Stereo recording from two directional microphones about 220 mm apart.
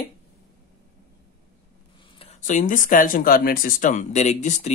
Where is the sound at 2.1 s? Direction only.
30° left (ahead or behind).